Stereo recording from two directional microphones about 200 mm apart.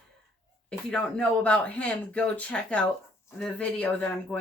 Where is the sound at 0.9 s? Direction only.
5° left (ahead or behind).